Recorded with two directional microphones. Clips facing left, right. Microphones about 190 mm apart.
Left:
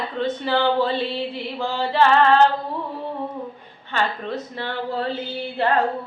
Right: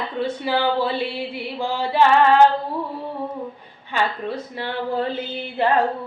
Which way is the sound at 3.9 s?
10° right (ahead or behind).